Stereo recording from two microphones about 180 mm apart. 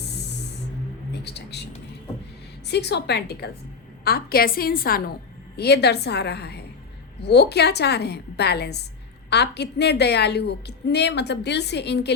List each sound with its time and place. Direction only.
1.1 s speech: 65° left (ahead or behind)
2.6 s a woman's voice: 70° left (ahead or behind)
5.5 s a woman's voice: 65° left (ahead or behind)